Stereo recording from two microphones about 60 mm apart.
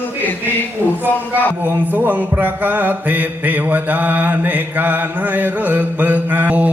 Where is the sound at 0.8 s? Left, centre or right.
Right.